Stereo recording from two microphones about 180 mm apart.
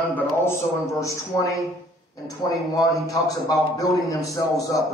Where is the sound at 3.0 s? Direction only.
20° left (ahead or behind).